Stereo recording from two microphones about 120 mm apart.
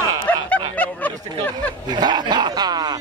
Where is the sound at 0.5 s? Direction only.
15° left (ahead or behind).